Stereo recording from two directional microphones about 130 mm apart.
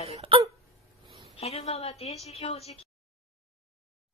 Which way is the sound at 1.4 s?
55° left (ahead or behind).